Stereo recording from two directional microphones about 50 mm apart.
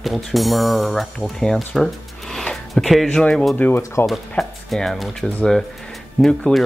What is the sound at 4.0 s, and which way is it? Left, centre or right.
Speech, left.